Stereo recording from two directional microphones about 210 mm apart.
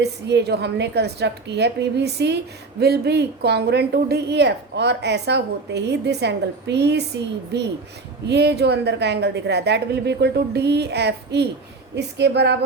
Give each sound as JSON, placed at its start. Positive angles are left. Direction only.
{"t": 0.0, "sound": "speech", "side_deg": -55}
{"t": 8.3, "sound": "a woman's voice", "side_deg": -50}